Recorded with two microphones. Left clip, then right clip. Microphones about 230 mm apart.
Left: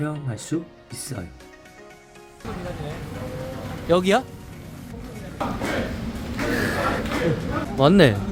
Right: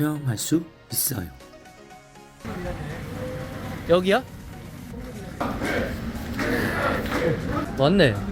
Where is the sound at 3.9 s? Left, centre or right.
Centre.